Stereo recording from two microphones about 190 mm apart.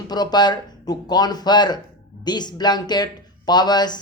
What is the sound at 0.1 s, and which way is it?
Speech, 20° left (ahead or behind).